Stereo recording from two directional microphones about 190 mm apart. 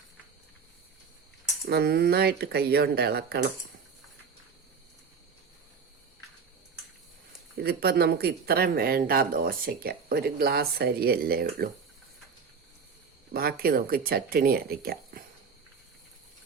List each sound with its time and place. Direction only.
1.6 s speech: 55° right (ahead or behind)
7.5 s speech: 55° right (ahead or behind)
13.3 s speech: 50° right (ahead or behind)